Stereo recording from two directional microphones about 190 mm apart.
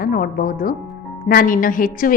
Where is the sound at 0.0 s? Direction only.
50° left (ahead or behind).